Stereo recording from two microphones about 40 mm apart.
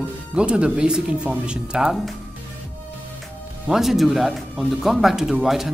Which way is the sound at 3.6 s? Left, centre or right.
Centre.